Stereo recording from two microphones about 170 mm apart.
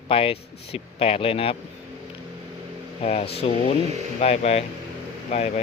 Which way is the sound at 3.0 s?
35° left (ahead or behind).